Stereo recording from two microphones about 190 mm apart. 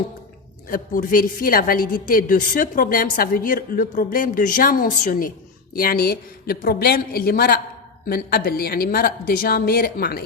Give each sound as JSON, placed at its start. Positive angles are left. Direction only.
{"t": 0.7, "sound": "a woman's voice", "side_deg": 45}